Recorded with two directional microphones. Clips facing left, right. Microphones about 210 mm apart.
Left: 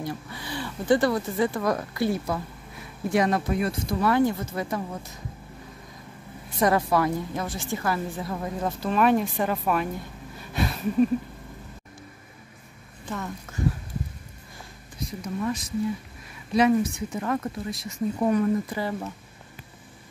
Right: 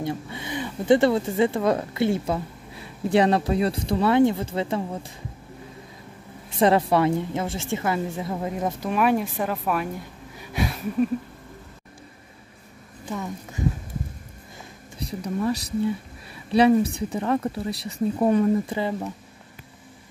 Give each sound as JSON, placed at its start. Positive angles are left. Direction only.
{"t": 0.0, "sound": "speech", "side_deg": -20}
{"t": 6.6, "sound": "speech", "side_deg": -25}
{"t": 8.9, "sound": "speech", "side_deg": -10}
{"t": 10.3, "sound": "a sound", "side_deg": -10}
{"t": 13.1, "sound": "speech", "side_deg": -15}
{"t": 15.0, "sound": "speech", "side_deg": -35}